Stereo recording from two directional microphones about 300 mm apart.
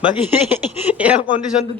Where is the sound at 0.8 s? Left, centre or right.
Centre.